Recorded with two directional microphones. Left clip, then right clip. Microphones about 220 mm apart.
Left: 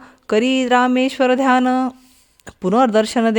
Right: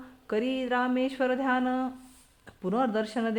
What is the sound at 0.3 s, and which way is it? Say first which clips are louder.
Speech: left 13 dB; 45° left (ahead or behind).